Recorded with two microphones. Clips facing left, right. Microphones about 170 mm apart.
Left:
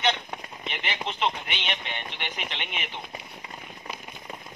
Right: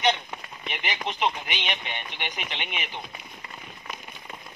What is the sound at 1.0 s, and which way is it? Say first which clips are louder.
Speech: right 1 dB; 10° right (ahead or behind).